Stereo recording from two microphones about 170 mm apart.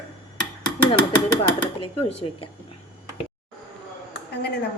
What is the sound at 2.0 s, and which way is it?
Speech, 35° left (ahead or behind).